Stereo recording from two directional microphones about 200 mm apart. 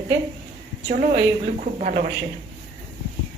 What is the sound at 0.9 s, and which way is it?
A woman's voice, 35° right (ahead or behind).